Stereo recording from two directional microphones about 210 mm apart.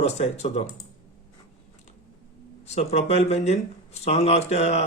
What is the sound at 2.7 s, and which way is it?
Speech, 30° left (ahead or behind).